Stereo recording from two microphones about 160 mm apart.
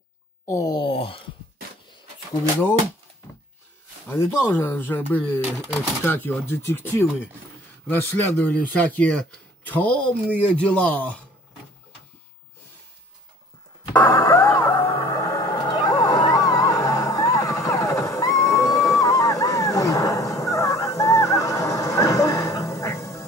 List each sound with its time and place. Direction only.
0.5 s wail: 20° left (ahead or behind)
4.1 s speech: 10° left (ahead or behind)
13.9 s music: 15° left (ahead or behind)
18.9 s a sound: 20° left (ahead or behind)